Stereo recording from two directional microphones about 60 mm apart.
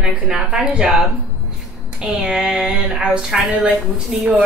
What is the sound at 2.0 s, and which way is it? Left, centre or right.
Speech, centre.